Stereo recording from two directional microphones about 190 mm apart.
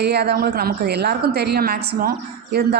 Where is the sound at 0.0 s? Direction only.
60° right (ahead or behind).